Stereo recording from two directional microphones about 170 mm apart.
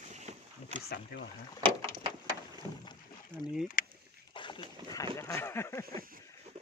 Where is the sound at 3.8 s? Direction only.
55° left (ahead or behind).